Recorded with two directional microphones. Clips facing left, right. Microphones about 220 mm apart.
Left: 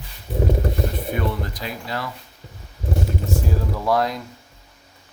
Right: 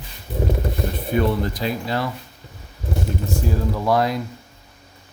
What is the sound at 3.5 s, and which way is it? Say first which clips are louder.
Speech: right 2 dB; centre (ahead or behind).